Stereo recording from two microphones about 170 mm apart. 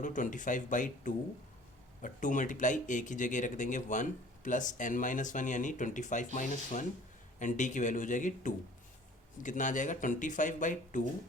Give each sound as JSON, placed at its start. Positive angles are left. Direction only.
{"t": 0.0, "sound": "speech", "side_deg": 50}